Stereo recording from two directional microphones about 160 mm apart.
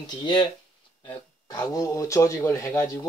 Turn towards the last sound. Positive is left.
turn(degrees=20)  # may be behind; listen again after turning